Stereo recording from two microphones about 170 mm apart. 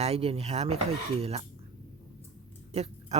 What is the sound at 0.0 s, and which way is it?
Speech, 35° right (ahead or behind).